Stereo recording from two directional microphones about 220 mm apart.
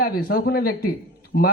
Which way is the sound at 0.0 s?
40° left (ahead or behind).